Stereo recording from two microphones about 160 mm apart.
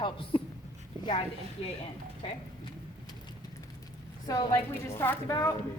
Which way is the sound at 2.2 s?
35° left (ahead or behind).